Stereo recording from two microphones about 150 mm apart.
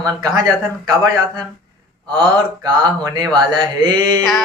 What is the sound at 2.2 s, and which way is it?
Speech, 30° right (ahead or behind).